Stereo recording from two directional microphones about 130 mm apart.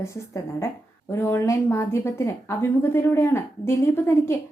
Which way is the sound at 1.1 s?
20° left (ahead or behind).